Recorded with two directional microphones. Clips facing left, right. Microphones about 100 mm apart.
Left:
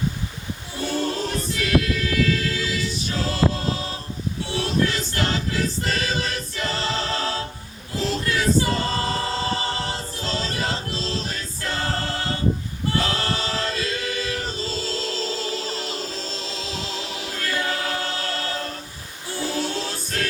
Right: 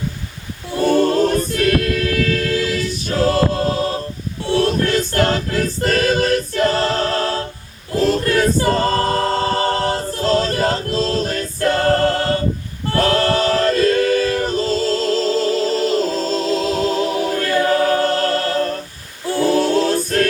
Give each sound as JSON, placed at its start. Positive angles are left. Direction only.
{"t": 0.8, "sound": "choir", "side_deg": -55}
{"t": 12.9, "sound": "a capella", "side_deg": -55}
{"t": 19.4, "sound": "choir", "side_deg": -55}